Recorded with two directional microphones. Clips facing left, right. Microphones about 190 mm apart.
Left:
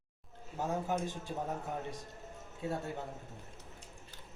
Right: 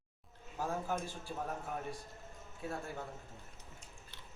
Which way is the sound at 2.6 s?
20° left (ahead or behind).